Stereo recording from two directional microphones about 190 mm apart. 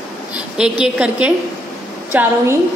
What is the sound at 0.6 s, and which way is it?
A woman's voice, 5° right (ahead or behind).